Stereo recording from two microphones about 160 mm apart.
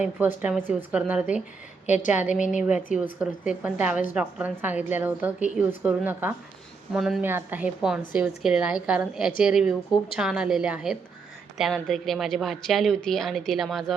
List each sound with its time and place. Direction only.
0.0 s a woman's voice: 10° right (ahead or behind)
1.9 s a woman's voice: 50° left (ahead or behind)
2.6 s a woman's voice: 10° right (ahead or behind)